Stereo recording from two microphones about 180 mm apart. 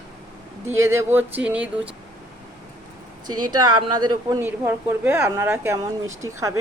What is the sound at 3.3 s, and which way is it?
A woman's voice, 25° right (ahead or behind).